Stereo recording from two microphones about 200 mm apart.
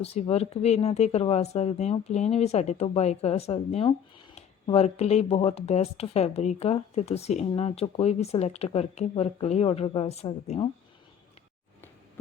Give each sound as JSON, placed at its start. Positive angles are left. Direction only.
{"t": 0.0, "sound": "speech", "side_deg": 30}